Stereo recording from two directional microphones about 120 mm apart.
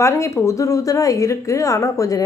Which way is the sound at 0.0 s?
25° left (ahead or behind).